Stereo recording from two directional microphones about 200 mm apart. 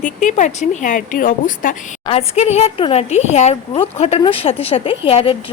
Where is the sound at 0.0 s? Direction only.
40° left (ahead or behind).